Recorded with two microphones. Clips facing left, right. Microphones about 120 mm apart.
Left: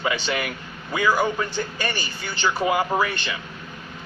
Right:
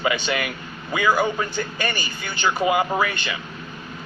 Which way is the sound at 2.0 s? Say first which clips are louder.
Even; 15° right (ahead or behind).